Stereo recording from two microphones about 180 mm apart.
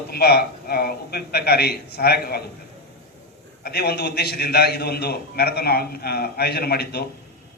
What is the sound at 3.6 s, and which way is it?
A man's voice, 60° left (ahead or behind).